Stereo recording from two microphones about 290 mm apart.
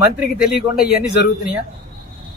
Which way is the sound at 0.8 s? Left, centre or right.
Centre.